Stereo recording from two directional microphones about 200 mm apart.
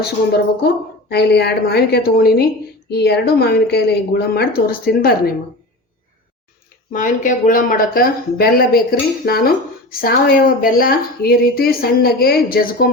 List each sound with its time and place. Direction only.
0.0 s a woman's voice: 55° left (ahead or behind)
6.9 s a woman's voice: 40° left (ahead or behind)